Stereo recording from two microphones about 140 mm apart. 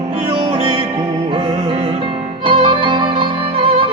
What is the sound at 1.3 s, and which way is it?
Music, 40° right (ahead or behind).